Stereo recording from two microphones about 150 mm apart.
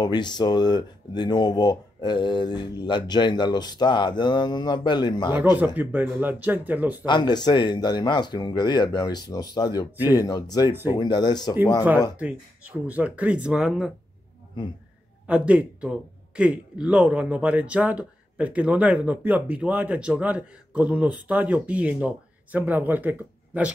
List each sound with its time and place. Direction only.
0.0 s speech: 30° left (ahead or behind)
5.3 s a man's voice: 10° right (ahead or behind)
7.1 s speech: 30° left (ahead or behind)
12.2 s a man's voice: 10° right (ahead or behind)
15.2 s a man's voice: 10° right (ahead or behind)